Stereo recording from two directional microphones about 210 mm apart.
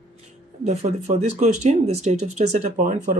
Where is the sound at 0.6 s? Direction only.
35° right (ahead or behind).